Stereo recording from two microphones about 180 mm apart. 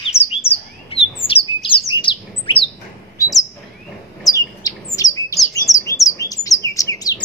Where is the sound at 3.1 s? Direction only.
20° left (ahead or behind).